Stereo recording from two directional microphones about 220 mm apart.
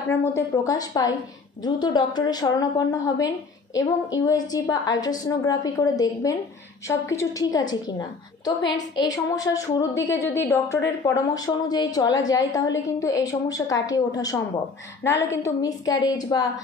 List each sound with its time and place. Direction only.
0.4 s a woman's voice: 15° left (ahead or behind)